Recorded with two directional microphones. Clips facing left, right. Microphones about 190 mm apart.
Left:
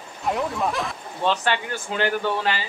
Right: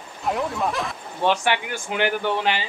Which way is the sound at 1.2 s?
15° right (ahead or behind).